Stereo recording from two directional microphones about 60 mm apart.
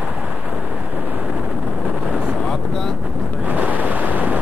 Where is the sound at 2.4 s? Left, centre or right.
Centre.